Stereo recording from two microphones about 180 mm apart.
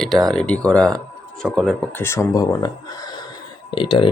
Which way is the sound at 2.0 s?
15° left (ahead or behind).